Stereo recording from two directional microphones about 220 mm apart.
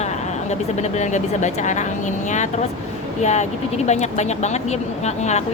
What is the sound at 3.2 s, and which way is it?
Speech, 30° left (ahead or behind).